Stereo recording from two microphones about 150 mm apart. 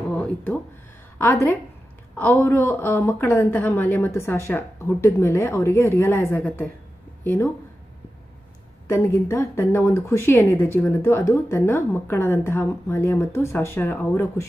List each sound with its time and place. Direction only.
0.1 s a sound: 10° left (ahead or behind)
1.1 s a woman's voice: 15° left (ahead or behind)
8.8 s speech: 15° left (ahead or behind)